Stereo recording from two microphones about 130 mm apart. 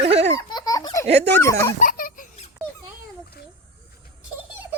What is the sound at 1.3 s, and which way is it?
Speech, 20° left (ahead or behind).